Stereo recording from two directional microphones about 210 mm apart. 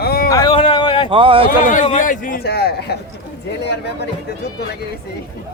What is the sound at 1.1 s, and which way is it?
Speech, 25° right (ahead or behind).